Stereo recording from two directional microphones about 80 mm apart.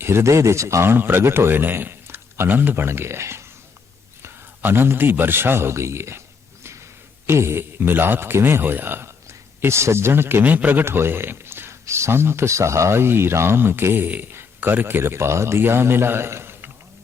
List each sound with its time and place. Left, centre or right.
0.0 s a man's voice: right